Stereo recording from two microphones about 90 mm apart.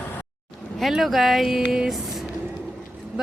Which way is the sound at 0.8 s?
Centre (ahead or behind).